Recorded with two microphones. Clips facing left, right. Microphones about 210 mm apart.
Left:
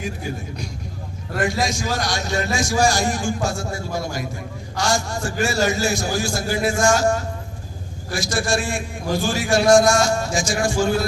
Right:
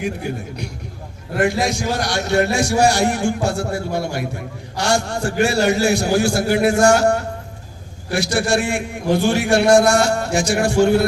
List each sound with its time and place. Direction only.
0.0 s a man's voice: 60° right (ahead or behind)